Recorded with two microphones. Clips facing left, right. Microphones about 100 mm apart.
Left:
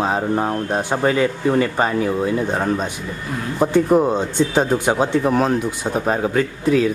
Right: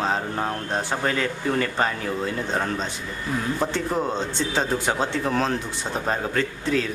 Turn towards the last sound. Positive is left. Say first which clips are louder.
# left 7 dB
turn(degrees=10)  # may be behind; listen again after turning